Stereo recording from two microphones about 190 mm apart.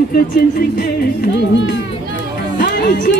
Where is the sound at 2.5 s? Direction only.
65° left (ahead or behind).